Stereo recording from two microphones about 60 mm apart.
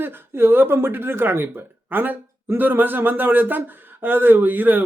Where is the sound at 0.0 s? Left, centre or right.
Right.